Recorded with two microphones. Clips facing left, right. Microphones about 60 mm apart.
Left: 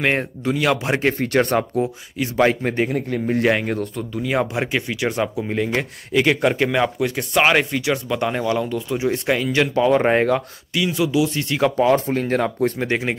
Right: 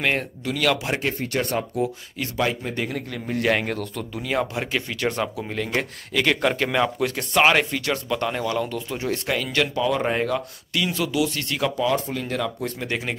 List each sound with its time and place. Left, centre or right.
0.0 s speech: left
0.9 s speech: left
2.8 s speech: left
4.2 s speech: centre
9.8 s speech: left
10.7 s speech: centre
11.1 s speech: centre
11.8 s speech: left